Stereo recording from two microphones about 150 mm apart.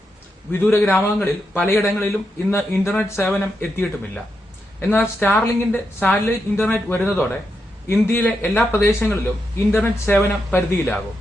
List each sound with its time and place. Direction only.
0.5 s a woman's voice: 15° left (ahead or behind)